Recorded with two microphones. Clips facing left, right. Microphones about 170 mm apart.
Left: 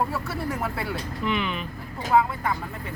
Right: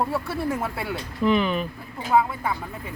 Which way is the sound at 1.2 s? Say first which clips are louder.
Right 7 dB; 40° right (ahead or behind).